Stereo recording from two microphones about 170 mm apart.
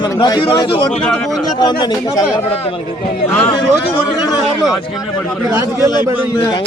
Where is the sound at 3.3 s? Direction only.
15° left (ahead or behind).